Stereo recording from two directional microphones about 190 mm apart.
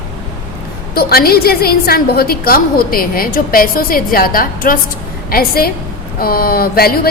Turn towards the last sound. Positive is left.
turn(degrees=50)  # may be behind; listen again after turning